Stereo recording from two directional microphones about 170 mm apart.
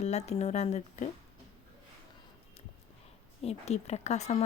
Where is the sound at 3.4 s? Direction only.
40° left (ahead or behind).